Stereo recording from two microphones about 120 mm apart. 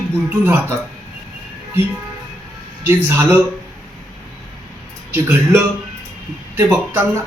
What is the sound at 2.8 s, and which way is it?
Speech, 20° right (ahead or behind).